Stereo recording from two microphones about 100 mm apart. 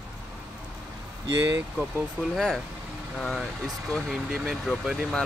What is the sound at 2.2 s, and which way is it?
Speech, centre (ahead or behind).